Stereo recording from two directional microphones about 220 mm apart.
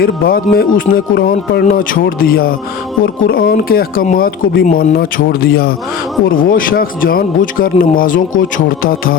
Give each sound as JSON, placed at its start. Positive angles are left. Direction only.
{"t": 0.0, "sound": "speech", "side_deg": 40}